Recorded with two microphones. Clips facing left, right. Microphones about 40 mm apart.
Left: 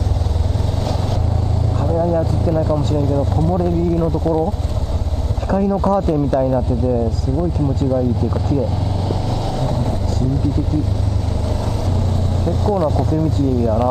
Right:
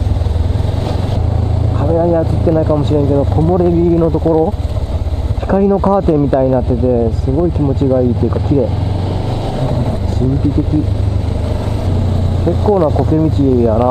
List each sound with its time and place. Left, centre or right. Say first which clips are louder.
1.8 s speech: right 6 dB; centre
5.5 s speech: right 5 dB; centre
9.6 s vehicle: right 5 dB; right
10.4 s speech: right 5 dB; right
11.9 s speech: right 3 dB; right